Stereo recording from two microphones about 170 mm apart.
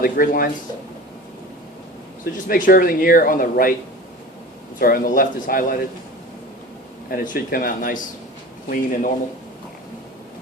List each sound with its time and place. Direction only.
0.0 s speech: 60° left (ahead or behind)
2.3 s speech: 50° left (ahead or behind)
4.8 s speech: 60° left (ahead or behind)
7.1 s speech: 60° left (ahead or behind)